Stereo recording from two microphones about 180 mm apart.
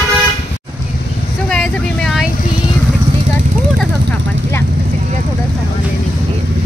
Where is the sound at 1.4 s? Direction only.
5° left (ahead or behind).